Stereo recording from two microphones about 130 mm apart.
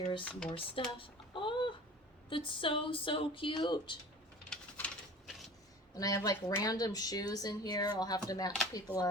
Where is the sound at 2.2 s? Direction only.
40° left (ahead or behind).